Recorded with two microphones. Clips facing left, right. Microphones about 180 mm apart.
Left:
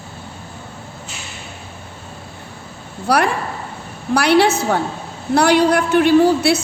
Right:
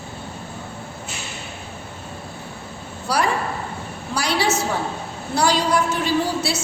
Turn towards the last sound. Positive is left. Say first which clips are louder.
# left 9 dB
turn(degrees=60)  # may be behind; listen again after turning